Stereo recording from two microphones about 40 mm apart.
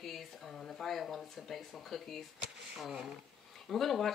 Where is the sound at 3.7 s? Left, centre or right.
Centre.